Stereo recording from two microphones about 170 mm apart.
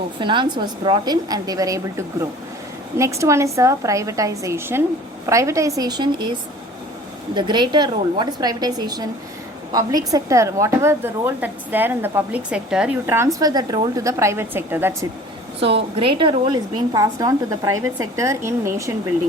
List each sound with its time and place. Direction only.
0.2 s a woman's voice: 25° right (ahead or behind)
7.3 s a woman's voice: 25° right (ahead or behind)
16.0 s a woman's voice: 30° right (ahead or behind)